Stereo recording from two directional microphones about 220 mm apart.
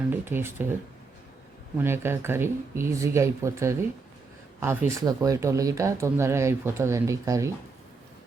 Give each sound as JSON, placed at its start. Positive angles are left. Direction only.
{"t": 0.1, "sound": "speech", "side_deg": -10}
{"t": 1.8, "sound": "speech", "side_deg": -10}